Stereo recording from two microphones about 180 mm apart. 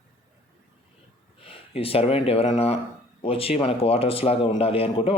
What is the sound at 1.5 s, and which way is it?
Speech, 30° left (ahead or behind).